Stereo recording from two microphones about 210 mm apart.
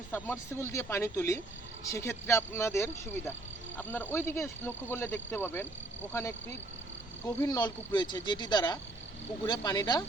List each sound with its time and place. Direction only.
0.1 s speech: 10° left (ahead or behind)
7.3 s speech: 15° left (ahead or behind)